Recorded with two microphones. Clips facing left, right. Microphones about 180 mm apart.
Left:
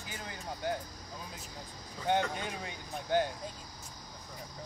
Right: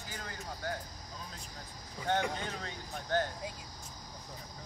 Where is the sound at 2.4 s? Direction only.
15° left (ahead or behind).